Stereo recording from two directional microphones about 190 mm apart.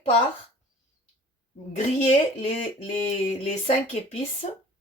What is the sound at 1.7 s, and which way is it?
Speech, 35° left (ahead or behind).